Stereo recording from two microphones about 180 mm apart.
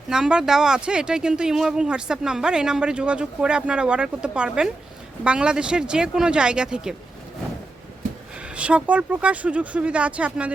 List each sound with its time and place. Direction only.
0.1 s speech: 5° right (ahead or behind)
8.5 s speech: 5° right (ahead or behind)